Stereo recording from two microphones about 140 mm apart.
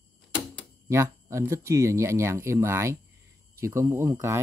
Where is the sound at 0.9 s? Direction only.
20° right (ahead or behind).